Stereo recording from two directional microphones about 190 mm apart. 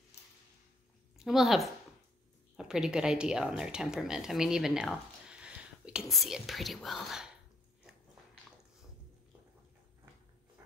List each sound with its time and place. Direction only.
1.2 s speech: centre (ahead or behind)